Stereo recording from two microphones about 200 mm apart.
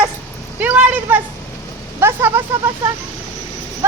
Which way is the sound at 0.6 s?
10° right (ahead or behind).